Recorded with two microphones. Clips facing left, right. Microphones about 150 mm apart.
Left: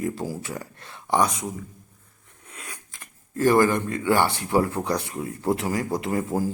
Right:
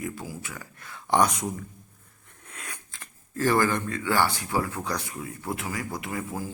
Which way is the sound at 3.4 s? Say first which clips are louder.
Left 5 dB; 20° left (ahead or behind).